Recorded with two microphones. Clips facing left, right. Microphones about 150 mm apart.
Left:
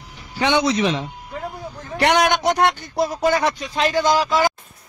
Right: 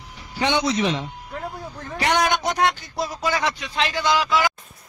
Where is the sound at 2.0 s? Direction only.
70° left (ahead or behind); by 4.5 s 40° left (ahead or behind).